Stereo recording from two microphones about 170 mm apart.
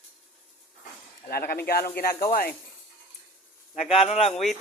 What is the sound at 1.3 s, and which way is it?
Speech, 65° left (ahead or behind).